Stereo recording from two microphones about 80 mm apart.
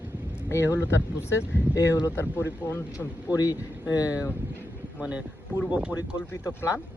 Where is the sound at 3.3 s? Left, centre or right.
Left.